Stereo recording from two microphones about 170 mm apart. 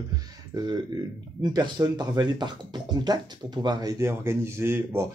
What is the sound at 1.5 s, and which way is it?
Speech, 25° right (ahead or behind).